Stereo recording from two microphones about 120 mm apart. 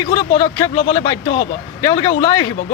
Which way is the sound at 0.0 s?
40° left (ahead or behind).